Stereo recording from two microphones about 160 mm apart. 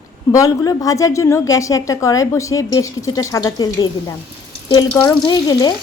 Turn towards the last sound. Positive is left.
turn(degrees=25)  # may be behind; listen again after turning